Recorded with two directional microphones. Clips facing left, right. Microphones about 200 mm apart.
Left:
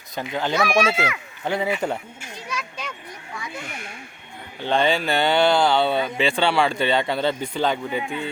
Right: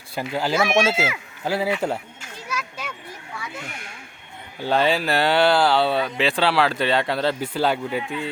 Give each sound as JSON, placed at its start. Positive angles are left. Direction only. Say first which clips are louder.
{"t": 0.2, "sound": "speech", "louder": "right 1 dB", "side_deg": -5}
{"t": 0.9, "sound": "speech", "louder": "right 1 dB", "side_deg": -25}
{"t": 1.5, "sound": "speech", "louder": "right 1 dB", "side_deg": -5}
{"t": 2.5, "sound": "children playing", "louder": "right 1 dB", "side_deg": -5}
{"t": 4.6, "sound": "speech", "louder": "even", "side_deg": -5}